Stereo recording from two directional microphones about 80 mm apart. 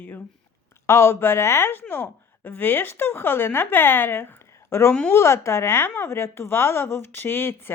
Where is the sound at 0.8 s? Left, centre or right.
Left.